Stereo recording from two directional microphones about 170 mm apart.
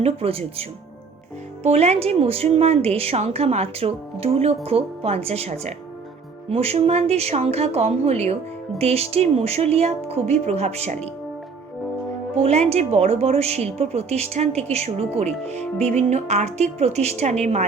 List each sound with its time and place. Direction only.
0.0 s a woman's voice: 35° right (ahead or behind)
12.4 s a woman's voice: 40° right (ahead or behind)